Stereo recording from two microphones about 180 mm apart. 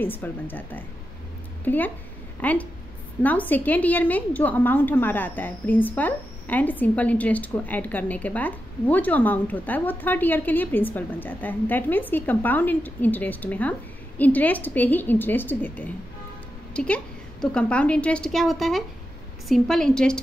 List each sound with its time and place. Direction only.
0.0 s a woman's voice: 10° left (ahead or behind)